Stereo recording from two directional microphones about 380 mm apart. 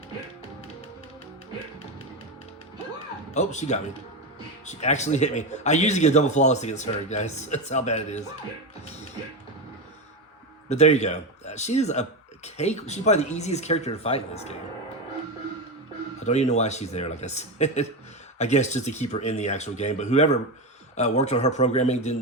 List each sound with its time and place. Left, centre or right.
3.3 s a man's voice: centre
10.7 s a man's voice: centre
16.2 s a man's voice: centre